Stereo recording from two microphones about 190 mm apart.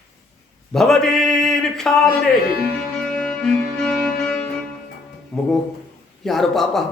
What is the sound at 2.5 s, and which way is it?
Speech, 50° left (ahead or behind).